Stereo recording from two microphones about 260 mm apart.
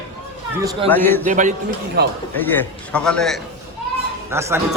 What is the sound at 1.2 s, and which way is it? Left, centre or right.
Speech, right.